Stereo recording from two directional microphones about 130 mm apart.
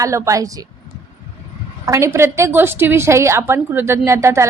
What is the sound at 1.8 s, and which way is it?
A woman's voice, 25° right (ahead or behind).